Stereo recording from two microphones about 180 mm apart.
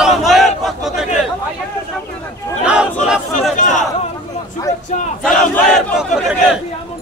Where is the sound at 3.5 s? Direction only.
45° left (ahead or behind).